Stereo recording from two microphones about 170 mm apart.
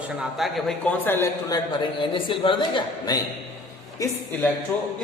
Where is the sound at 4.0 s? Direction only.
10° left (ahead or behind).